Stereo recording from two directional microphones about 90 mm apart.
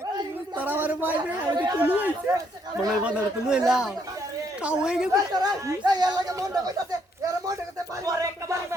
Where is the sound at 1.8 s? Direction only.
20° right (ahead or behind).